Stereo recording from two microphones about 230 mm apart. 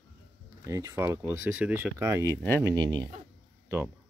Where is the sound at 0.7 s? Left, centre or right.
Centre.